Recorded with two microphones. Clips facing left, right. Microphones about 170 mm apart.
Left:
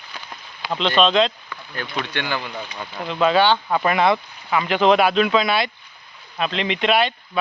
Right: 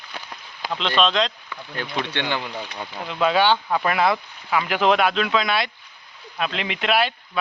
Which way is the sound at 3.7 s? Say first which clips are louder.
Left 2 dB; centre (ahead or behind).